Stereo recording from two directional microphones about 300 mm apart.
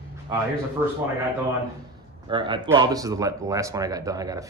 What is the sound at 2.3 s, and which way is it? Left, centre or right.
Speech, centre.